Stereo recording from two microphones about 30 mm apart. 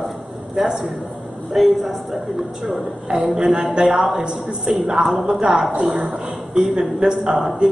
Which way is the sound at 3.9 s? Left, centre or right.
Centre.